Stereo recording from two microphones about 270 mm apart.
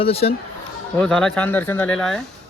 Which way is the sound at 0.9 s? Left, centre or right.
Centre.